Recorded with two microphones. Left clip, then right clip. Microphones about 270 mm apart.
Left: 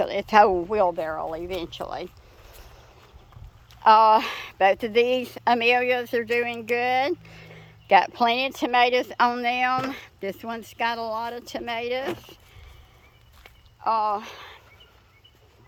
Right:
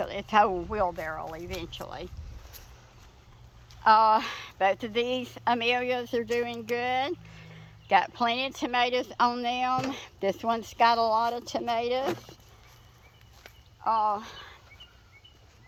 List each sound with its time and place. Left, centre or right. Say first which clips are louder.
0.0 s speech: left 6 dB; left
3.8 s speech: left 5 dB; centre
13.8 s speech: left 3 dB; centre